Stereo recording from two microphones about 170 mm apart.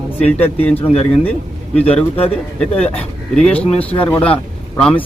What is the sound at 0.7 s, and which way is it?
Speech, 35° left (ahead or behind).